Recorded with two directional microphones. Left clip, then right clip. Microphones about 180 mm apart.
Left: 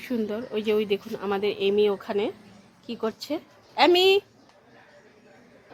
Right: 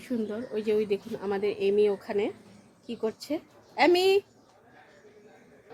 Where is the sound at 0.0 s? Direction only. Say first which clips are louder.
Left 3 dB; 15° left (ahead or behind).